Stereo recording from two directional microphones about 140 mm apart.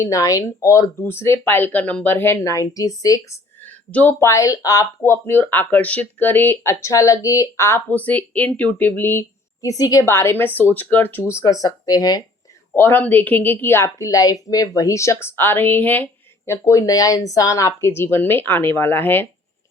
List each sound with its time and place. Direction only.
0.0 s speech: 25° left (ahead or behind)
12.7 s speech: 15° left (ahead or behind)